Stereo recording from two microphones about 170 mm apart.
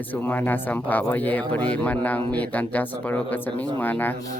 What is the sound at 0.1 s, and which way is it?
Speech, 10° left (ahead or behind).